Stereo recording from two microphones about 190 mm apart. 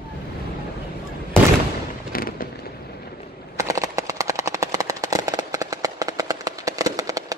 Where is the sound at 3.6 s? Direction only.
15° right (ahead or behind).